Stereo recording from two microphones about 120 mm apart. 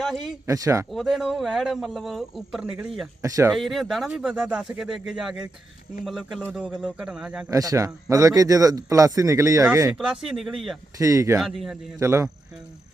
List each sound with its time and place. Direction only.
0.0 s speech: centre (ahead or behind)
0.4 s a man's voice: 25° right (ahead or behind)
0.9 s speech: centre (ahead or behind)
3.2 s a man's voice: 25° right (ahead or behind)
3.5 s a man's voice: centre (ahead or behind)
7.5 s a man's voice: 30° right (ahead or behind)
9.9 s speech: 5° right (ahead or behind)
10.9 s a man's voice: 25° right (ahead or behind)
11.3 s speech: centre (ahead or behind)
11.9 s a man's voice: 25° right (ahead or behind)